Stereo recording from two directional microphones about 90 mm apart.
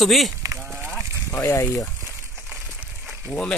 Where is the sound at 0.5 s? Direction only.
15° right (ahead or behind).